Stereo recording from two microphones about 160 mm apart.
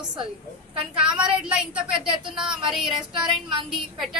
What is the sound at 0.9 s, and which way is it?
A woman's voice, 5° right (ahead or behind).